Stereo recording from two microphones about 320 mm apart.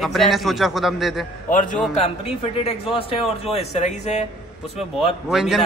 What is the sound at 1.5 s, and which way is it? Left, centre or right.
A man's voice, left.